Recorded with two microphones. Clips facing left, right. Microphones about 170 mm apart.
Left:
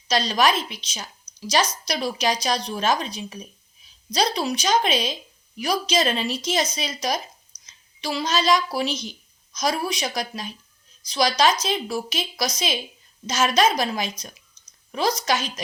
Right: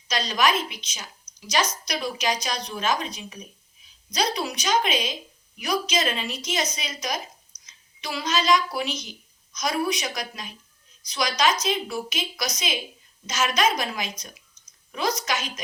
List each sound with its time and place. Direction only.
0.1 s a woman's voice: 30° left (ahead or behind)